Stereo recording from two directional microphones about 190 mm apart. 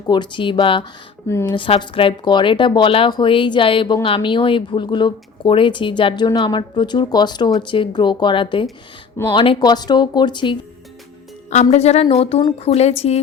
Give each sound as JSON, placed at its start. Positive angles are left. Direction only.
{"t": 0.1, "sound": "speech", "side_deg": 25}
{"t": 1.3, "sound": "a woman's voice", "side_deg": 15}
{"t": 1.5, "sound": "speech", "side_deg": 25}
{"t": 11.5, "sound": "a woman's voice", "side_deg": 35}